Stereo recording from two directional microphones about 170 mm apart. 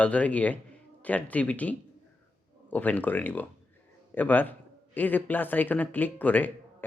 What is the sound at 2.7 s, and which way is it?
Speech, 10° left (ahead or behind).